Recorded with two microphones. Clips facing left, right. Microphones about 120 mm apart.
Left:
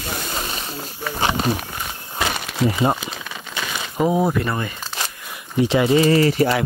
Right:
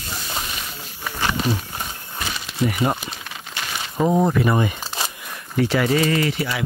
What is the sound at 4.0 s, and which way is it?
Speech, 5° left (ahead or behind).